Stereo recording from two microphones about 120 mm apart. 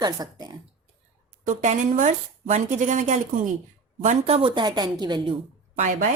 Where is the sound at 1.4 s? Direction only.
90° right.